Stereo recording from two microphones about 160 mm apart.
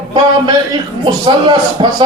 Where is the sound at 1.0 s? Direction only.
30° right (ahead or behind).